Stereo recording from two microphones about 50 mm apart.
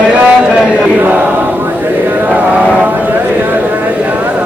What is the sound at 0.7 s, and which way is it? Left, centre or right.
Chant, right.